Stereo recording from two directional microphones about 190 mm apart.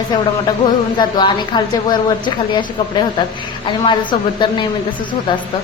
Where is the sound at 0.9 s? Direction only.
25° left (ahead or behind).